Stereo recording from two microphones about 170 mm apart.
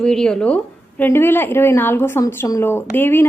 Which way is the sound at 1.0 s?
15° left (ahead or behind).